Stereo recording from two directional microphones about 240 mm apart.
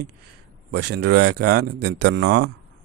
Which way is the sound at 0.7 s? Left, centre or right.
Right.